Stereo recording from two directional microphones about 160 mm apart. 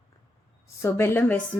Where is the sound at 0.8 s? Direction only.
15° left (ahead or behind).